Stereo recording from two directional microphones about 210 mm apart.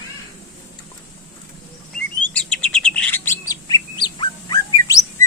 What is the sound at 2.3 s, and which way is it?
Bird, 5° left (ahead or behind).